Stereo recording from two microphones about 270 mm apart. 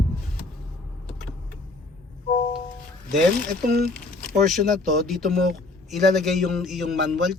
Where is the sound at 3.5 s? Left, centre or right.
Right.